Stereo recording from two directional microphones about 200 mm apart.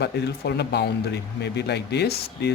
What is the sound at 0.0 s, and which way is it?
Speech, 55° left (ahead or behind).